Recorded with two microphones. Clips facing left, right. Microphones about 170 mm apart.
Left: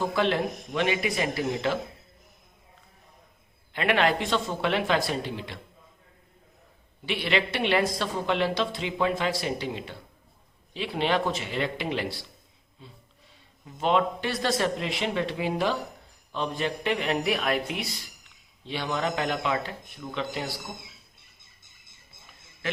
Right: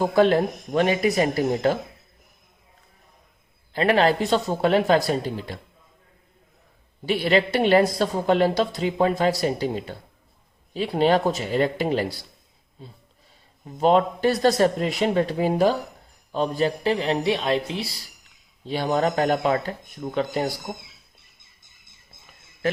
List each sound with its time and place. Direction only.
0.0 s a man's voice: 40° right (ahead or behind)
3.7 s a man's voice: 35° right (ahead or behind)
7.0 s a man's voice: 40° right (ahead or behind)